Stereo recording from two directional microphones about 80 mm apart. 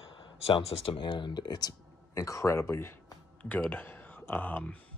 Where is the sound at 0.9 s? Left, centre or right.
Left.